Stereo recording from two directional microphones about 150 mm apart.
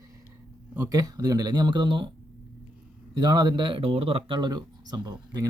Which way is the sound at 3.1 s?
30° right (ahead or behind).